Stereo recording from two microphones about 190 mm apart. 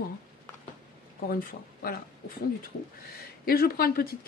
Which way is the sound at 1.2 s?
50° left (ahead or behind).